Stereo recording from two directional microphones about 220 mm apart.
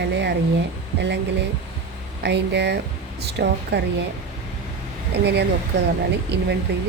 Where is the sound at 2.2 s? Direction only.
50° right (ahead or behind).